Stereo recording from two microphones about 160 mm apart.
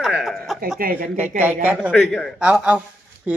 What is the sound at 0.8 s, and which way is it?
Speech, 65° right (ahead or behind).